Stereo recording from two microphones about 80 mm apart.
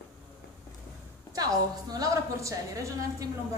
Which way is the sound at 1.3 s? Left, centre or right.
Right.